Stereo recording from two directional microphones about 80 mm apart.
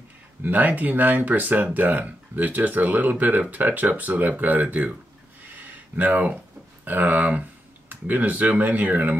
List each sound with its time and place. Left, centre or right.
0.4 s speech: right
5.6 s a sound: right
7.9 s speech: right